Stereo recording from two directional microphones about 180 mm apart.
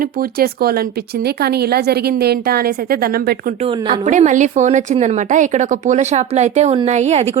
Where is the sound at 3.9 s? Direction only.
45° right (ahead or behind).